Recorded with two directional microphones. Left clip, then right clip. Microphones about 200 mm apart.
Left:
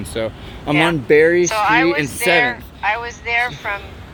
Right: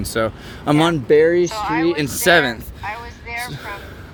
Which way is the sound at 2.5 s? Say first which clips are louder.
Left 6 dB; 20° left (ahead or behind).